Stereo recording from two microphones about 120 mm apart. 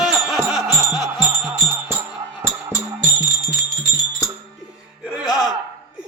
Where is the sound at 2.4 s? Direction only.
20° right (ahead or behind).